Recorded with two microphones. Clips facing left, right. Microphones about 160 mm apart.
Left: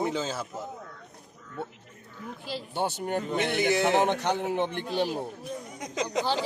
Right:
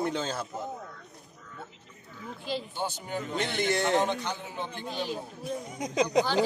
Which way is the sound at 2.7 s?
65° left (ahead or behind).